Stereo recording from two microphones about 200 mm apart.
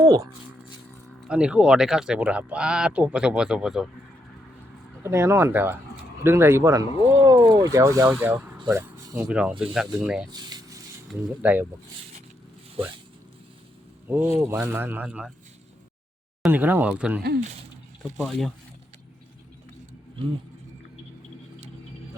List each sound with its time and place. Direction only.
0.0 s speech: 15° right (ahead or behind)
1.3 s speech: 5° right (ahead or behind)
5.0 s speech: 15° right (ahead or behind)
8.6 s a sound: 10° right (ahead or behind)
9.2 s speech: 5° right (ahead or behind)
10.3 s a sound: 20° right (ahead or behind)
11.1 s speech: 5° right (ahead or behind)
14.3 s speech: 10° right (ahead or behind)
16.4 s speech: 10° right (ahead or behind)